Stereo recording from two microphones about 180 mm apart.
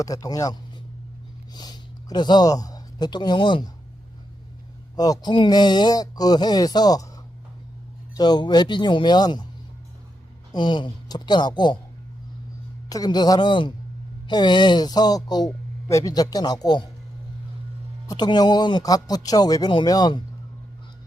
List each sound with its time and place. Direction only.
0.0 s speech: 20° left (ahead or behind)
1.5 s speech: 20° left (ahead or behind)
4.9 s speech: 20° left (ahead or behind)
8.1 s speech: 25° left (ahead or behind)
10.5 s speech: 25° left (ahead or behind)
12.9 s speech: 20° left (ahead or behind)
18.1 s speech: 25° left (ahead or behind)